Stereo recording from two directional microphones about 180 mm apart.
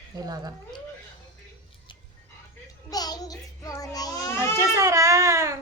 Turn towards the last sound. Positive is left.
turn(degrees=-15)  # may be behind; listen again after turning